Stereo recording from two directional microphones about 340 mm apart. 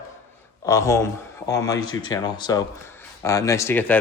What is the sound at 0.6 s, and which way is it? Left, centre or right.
A man's voice, centre.